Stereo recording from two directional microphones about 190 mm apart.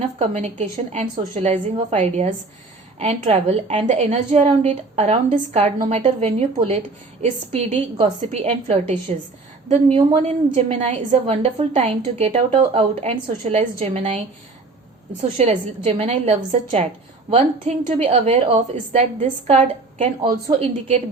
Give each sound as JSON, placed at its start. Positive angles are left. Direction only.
{"t": 0.2, "sound": "a woman's voice", "side_deg": -35}
{"t": 15.4, "sound": "a woman's voice", "side_deg": -35}